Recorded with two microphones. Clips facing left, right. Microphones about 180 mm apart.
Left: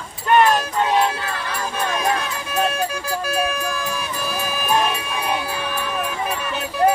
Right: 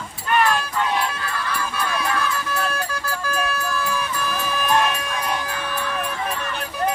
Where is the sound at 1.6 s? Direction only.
40° left (ahead or behind).